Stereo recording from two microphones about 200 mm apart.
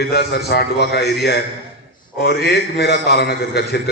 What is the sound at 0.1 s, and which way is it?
A man's voice, 55° left (ahead or behind).